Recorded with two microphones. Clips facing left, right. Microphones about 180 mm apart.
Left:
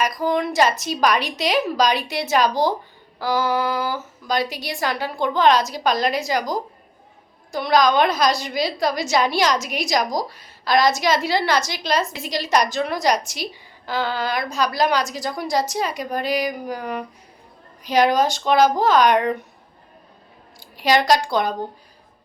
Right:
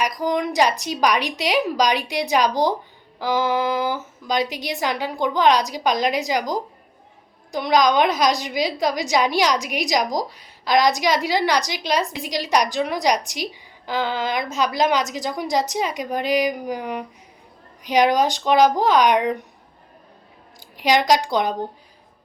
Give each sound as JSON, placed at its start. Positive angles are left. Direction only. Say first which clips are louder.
{"t": 0.0, "sound": "a woman's voice", "louder": "left 1 dB", "side_deg": -15}
{"t": 20.7, "sound": "a woman's voice", "louder": "even", "side_deg": -15}